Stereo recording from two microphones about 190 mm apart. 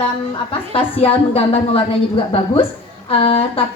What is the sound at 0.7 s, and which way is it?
A woman's voice, 30° left (ahead or behind).